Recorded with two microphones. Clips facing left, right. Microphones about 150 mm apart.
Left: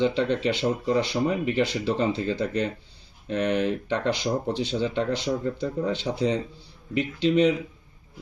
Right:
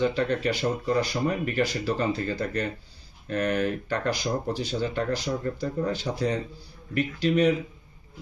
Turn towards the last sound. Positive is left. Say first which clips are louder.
# left 2 dB
turn(degrees=25)  # may be behind; listen again after turning